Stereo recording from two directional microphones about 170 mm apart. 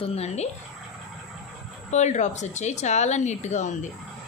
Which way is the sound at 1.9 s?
45° left (ahead or behind).